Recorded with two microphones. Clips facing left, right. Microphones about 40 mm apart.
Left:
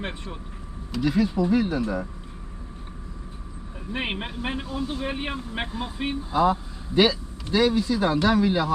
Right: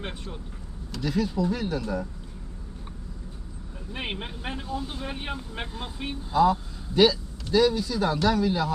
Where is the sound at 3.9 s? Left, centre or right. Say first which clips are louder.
Left 4 dB; left.